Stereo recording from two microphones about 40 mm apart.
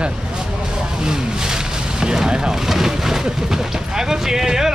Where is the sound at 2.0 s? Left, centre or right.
Centre.